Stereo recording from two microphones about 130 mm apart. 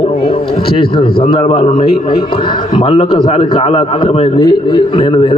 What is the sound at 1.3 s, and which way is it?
Speech, 45° left (ahead or behind).